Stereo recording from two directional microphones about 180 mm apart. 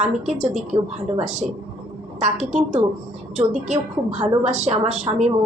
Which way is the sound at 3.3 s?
40° right (ahead or behind).